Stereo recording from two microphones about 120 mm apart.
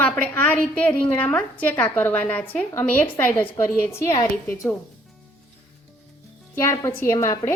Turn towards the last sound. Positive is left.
turn(degrees=25)  # may be behind; listen again after turning